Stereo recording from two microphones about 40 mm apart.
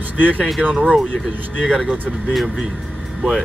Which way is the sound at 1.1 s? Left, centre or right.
Left.